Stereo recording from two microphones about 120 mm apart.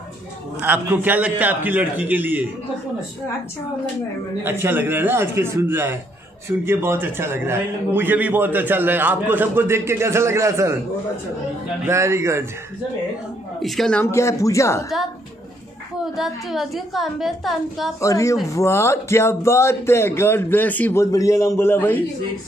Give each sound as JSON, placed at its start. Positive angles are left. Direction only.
{"t": 0.6, "sound": "a man's voice", "side_deg": -15}
{"t": 4.4, "sound": "a man's voice", "side_deg": -20}
{"t": 11.8, "sound": "a man's voice", "side_deg": -25}
{"t": 13.6, "sound": "a woman's voice", "side_deg": 0}
{"t": 14.1, "sound": "speech", "side_deg": 25}
{"t": 16.2, "sound": "a woman's voice", "side_deg": 0}
{"t": 18.0, "sound": "speech", "side_deg": 25}
{"t": 21.0, "sound": "speech", "side_deg": 30}